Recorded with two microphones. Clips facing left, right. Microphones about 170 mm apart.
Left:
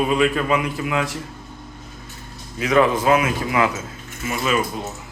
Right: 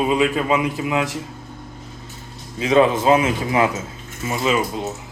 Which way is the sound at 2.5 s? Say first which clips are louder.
Right 2 dB; 25° right (ahead or behind).